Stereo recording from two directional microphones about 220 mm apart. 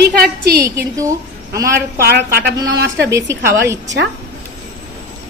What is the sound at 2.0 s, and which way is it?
Speech, 45° right (ahead or behind).